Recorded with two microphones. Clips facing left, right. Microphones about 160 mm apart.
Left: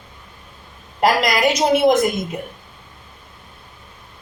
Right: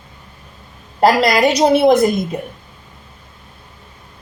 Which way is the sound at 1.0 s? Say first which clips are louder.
Right 4 dB; 35° right (ahead or behind).